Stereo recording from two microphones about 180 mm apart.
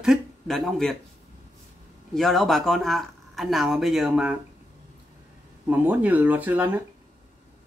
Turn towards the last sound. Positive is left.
turn(degrees=-10)  # may be behind; listen again after turning